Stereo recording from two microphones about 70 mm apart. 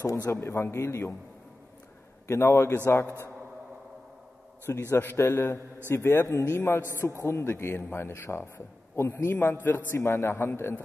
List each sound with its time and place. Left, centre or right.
0.0 s speech: left
0.3 s a man's voice: left
2.2 s a man's voice: left
4.6 s a man's voice: left
9.4 s a man's voice: left